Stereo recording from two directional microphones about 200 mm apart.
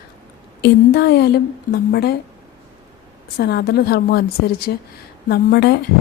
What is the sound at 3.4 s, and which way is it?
A woman's voice, 55° left (ahead or behind).